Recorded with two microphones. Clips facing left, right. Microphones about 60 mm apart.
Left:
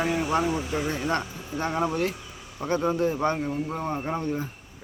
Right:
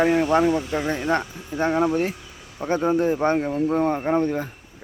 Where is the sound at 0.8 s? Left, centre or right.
Right.